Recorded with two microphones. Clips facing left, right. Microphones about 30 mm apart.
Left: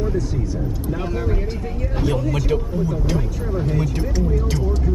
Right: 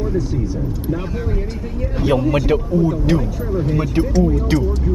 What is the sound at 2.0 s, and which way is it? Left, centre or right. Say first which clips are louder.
Speech: right 6 dB; centre.